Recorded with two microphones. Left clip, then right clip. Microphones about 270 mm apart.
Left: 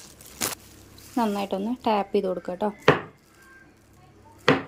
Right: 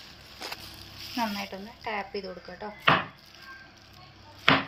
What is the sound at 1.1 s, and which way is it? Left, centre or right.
Speech, left.